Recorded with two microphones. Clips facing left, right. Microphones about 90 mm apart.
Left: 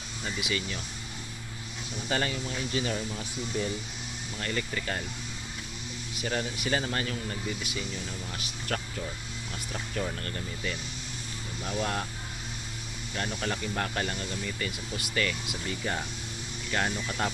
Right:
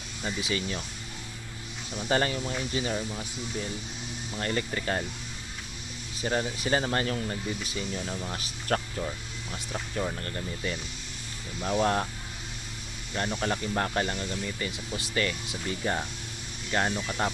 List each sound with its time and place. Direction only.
0.4 s speech: 35° right (ahead or behind)
2.0 s speech: 35° right (ahead or behind)
3.1 s speech: 10° right (ahead or behind)
4.4 s speech: 35° right (ahead or behind)
6.1 s speech: 30° right (ahead or behind)
9.5 s speech: 20° right (ahead or behind)
10.2 s speech: 30° right (ahead or behind)
13.1 s speech: 30° right (ahead or behind)
16.7 s speech: 20° right (ahead or behind)